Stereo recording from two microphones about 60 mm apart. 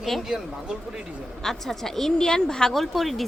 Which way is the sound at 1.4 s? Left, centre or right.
Centre.